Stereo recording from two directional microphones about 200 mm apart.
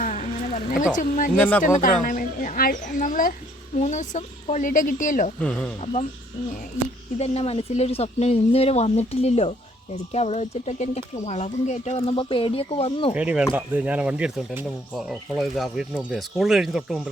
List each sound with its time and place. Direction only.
0.0 s a sound: 40° left (ahead or behind)
0.9 s speech: 40° left (ahead or behind)
1.4 s speech: 5° left (ahead or behind)
1.6 s a woman's voice: 45° left (ahead or behind)
5.4 s speech: 5° left (ahead or behind)
5.8 s speech: 35° left (ahead or behind)
7.2 s speech: 30° left (ahead or behind)
13.1 s speech: 5° right (ahead or behind)